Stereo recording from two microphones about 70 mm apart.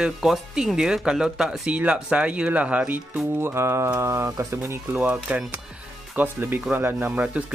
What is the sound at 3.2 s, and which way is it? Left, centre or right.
Speech, right.